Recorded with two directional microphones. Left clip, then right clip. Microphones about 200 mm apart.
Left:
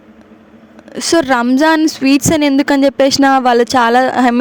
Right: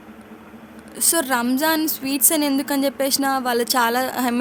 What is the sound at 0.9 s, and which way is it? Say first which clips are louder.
A woman's voice: left 9 dB; 35° left (ahead or behind).